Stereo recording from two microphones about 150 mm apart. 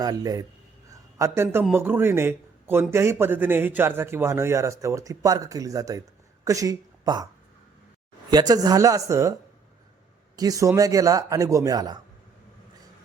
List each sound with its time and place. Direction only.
0.0 s a man's voice: 25° right (ahead or behind)
8.3 s a man's voice: 25° right (ahead or behind)
10.3 s a man's voice: 25° right (ahead or behind)